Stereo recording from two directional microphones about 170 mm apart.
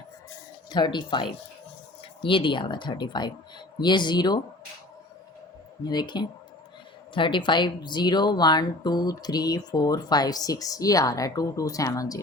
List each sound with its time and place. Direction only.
0.7 s speech: 25° left (ahead or behind)
5.8 s speech: 25° left (ahead or behind)